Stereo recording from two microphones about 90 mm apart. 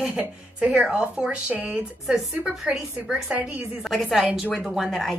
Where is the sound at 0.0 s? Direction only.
10° right (ahead or behind).